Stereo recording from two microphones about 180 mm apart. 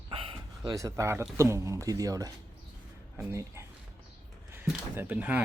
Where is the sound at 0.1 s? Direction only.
30° right (ahead or behind).